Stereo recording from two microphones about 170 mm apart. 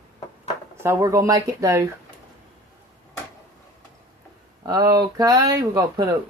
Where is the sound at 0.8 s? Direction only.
15° right (ahead or behind).